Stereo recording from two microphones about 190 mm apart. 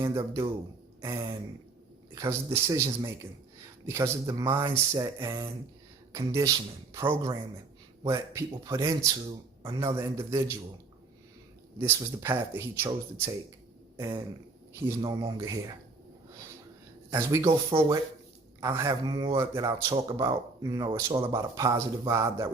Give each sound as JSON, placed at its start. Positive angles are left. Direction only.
{"t": 0.0, "sound": "speech", "side_deg": -15}
{"t": 11.8, "sound": "speech", "side_deg": -10}
{"t": 17.1, "sound": "speech", "side_deg": -15}